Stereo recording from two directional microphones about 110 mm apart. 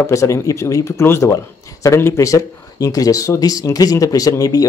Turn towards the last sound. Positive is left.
turn(degrees=35)  # may be behind; listen again after turning